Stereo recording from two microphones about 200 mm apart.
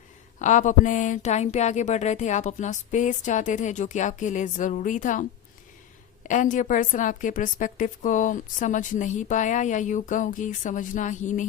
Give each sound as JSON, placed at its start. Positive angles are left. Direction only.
{"t": 0.3, "sound": "a woman's voice", "side_deg": 40}
{"t": 6.2, "sound": "a woman's voice", "side_deg": 40}